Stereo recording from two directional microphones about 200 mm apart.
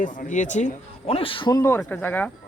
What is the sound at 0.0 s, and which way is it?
Speech, 40° left (ahead or behind).